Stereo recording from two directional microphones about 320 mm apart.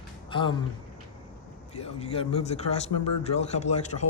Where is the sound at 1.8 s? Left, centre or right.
Centre.